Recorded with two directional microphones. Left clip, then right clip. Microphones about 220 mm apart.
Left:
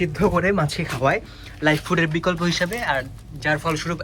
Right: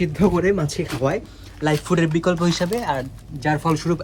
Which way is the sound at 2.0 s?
20° right (ahead or behind).